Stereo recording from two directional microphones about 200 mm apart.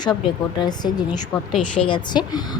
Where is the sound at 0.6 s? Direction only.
20° left (ahead or behind).